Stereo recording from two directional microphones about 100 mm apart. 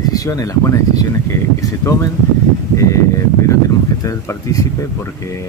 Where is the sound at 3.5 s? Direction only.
30° left (ahead or behind).